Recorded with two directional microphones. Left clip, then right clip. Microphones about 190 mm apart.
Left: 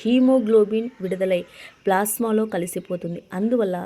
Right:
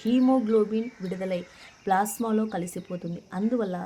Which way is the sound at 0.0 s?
25° left (ahead or behind).